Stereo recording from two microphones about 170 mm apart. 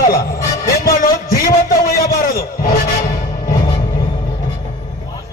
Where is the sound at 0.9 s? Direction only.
55° left (ahead or behind).